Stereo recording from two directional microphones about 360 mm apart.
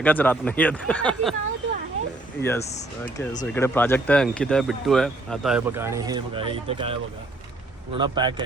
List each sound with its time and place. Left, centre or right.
0.0 s speech: centre
2.4 s speech: centre
2.6 s speech: centre
3.4 s speech: centre
7.9 s speech: centre